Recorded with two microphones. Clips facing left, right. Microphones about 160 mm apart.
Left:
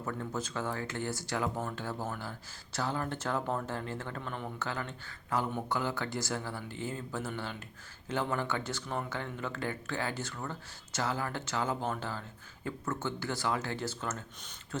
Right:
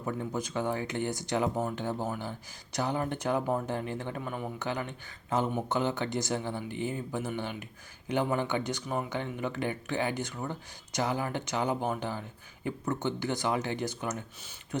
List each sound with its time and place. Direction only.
0.0 s speech: 15° right (ahead or behind)